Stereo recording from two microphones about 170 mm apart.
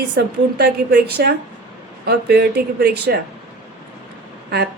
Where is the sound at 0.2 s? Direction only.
85° right.